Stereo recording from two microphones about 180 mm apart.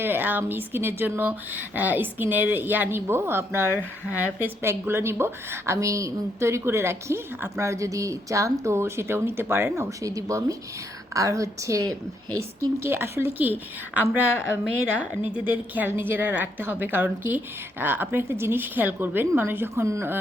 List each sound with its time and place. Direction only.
0.0 s speech: 10° right (ahead or behind)